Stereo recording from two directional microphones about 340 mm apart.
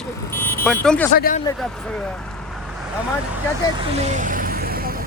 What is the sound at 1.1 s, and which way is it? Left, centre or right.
Speech, left.